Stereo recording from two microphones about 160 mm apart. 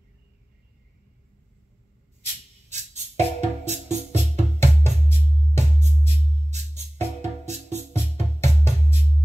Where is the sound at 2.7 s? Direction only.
45° right (ahead or behind).